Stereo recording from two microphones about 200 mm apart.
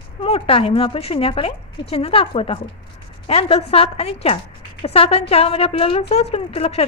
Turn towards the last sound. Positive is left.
turn(degrees=30)  # may be behind; listen again after turning